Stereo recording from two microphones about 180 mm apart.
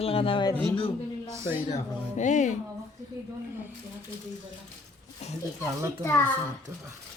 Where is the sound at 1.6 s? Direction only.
40° left (ahead or behind).